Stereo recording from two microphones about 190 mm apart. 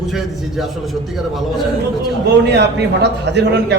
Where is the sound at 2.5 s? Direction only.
60° right (ahead or behind).